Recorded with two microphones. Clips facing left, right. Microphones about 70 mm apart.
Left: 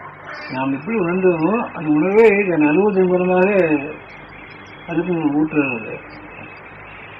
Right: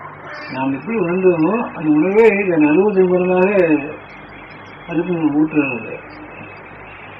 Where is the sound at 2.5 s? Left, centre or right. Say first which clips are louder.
Right 2 dB; left.